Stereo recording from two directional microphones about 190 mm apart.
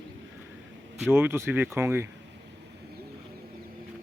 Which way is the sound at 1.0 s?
10° right (ahead or behind).